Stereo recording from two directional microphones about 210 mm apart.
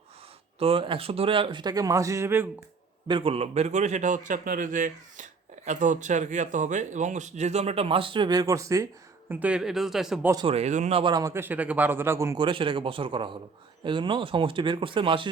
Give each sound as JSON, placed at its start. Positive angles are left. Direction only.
{"t": 0.6, "sound": "a man's voice", "side_deg": -25}
{"t": 3.1, "sound": "speech", "side_deg": -25}
{"t": 10.3, "sound": "a man's voice", "side_deg": -25}